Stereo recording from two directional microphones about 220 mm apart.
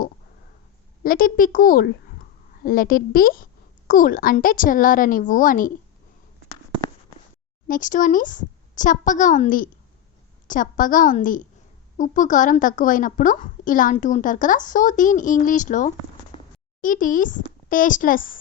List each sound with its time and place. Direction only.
1.0 s a woman's voice: 40° left (ahead or behind)
7.7 s a woman's voice: 35° left (ahead or behind)
16.3 s a sound: 25° left (ahead or behind)
16.8 s a woman's voice: 35° left (ahead or behind)